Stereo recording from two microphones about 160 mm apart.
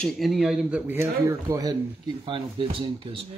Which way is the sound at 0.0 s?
Centre (ahead or behind).